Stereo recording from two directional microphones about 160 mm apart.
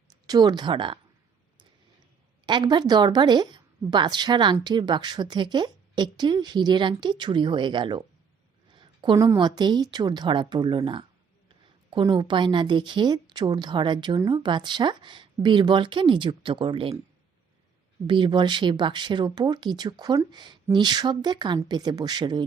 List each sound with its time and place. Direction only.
0.3 s a woman's voice: 25° right (ahead or behind)
2.5 s a woman's voice: 30° right (ahead or behind)
8.7 s a sound: 30° right (ahead or behind)
9.6 s a woman's voice: 25° right (ahead or behind)
18.0 s a woman's voice: 30° right (ahead or behind)